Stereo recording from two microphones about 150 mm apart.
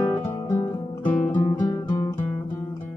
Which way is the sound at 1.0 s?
10° left (ahead or behind).